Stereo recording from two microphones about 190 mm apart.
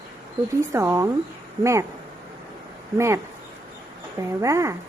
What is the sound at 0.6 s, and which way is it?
Speech, 15° right (ahead or behind).